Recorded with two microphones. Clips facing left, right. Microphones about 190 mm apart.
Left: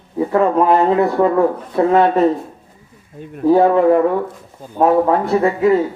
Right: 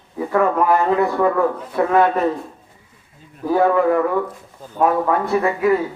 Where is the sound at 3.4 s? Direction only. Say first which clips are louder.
Left 5 dB; 25° left (ahead or behind).